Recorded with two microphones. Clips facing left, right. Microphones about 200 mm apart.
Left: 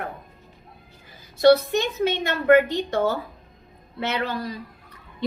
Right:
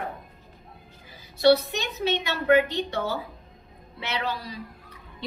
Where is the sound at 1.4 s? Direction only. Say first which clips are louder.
Left 4 dB; 50° left (ahead or behind).